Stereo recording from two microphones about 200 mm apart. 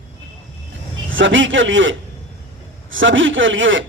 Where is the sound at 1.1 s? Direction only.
70° right (ahead or behind).